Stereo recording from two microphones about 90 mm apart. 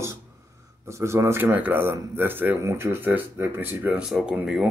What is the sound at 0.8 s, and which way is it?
Speech, 30° right (ahead or behind).